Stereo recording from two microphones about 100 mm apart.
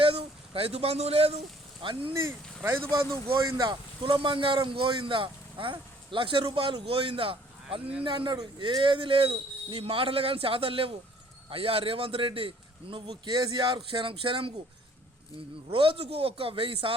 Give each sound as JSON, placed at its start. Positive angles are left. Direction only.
{"t": 0.0, "sound": "speech", "side_deg": -75}
{"t": 1.8, "sound": "speech", "side_deg": -60}
{"t": 2.1, "sound": "speech", "side_deg": -25}
{"t": 3.2, "sound": "speech", "side_deg": -60}
{"t": 8.4, "sound": "speech", "side_deg": -45}
{"t": 13.2, "sound": "speech", "side_deg": -45}
{"t": 15.7, "sound": "speech", "side_deg": -60}